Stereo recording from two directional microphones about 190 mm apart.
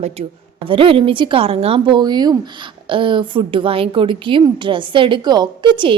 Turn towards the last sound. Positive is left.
turn(degrees=-25)  # may be behind; listen again after turning